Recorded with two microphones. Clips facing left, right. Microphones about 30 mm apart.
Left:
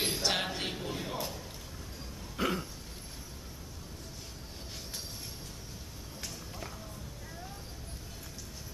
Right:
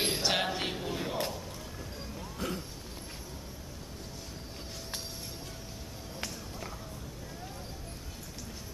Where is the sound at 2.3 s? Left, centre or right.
Left.